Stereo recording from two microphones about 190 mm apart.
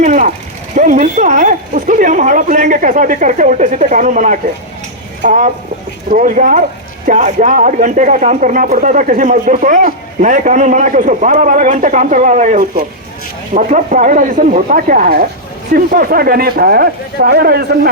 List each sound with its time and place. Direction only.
0.0 s speech: 40° right (ahead or behind)